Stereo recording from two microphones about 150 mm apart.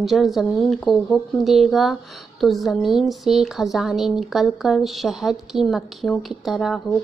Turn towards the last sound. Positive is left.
turn(degrees=0)  # may be behind; listen again after turning